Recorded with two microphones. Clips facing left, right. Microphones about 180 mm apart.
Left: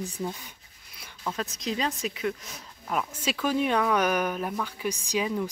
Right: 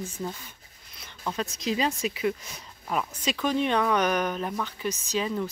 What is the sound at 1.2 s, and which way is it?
Speech, centre (ahead or behind).